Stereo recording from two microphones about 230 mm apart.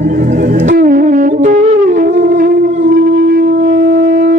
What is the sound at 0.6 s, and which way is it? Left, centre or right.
Wind instrument, right.